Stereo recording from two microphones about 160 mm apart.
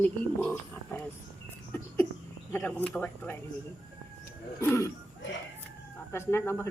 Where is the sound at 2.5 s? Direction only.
10° left (ahead or behind).